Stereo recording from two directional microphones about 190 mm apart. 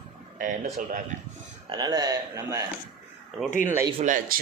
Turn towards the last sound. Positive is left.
turn(degrees=-45)  # may be behind; listen again after turning